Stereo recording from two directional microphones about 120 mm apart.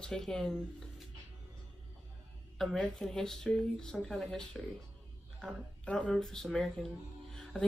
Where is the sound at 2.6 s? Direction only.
5° left (ahead or behind).